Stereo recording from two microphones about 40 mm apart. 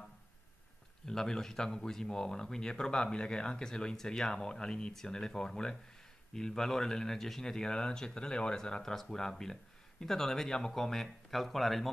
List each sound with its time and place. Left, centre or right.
1.0 s speech: centre